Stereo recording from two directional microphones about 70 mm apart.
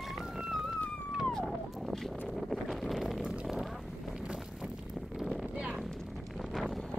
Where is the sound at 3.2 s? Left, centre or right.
Centre.